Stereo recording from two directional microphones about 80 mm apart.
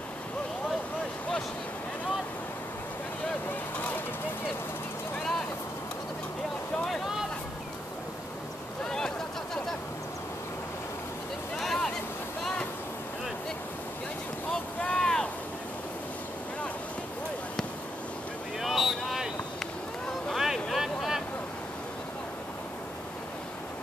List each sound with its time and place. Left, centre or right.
3.7 s vehicle: left
8.8 s a sound: centre
11.5 s vehicle: centre
14.5 s boat: centre
18.6 s vehicle: centre